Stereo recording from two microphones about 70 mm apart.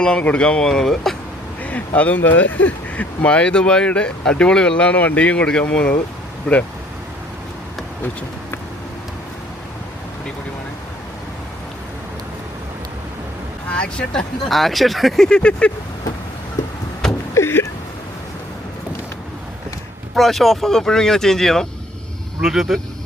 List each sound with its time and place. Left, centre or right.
0.0 s speech: centre
1.6 s speech: left
13.7 s speech: centre
17.3 s a sound: left
20.1 s speech: centre
22.4 s speech: centre